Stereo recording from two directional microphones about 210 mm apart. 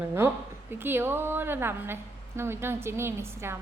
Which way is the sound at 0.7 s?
10° right (ahead or behind).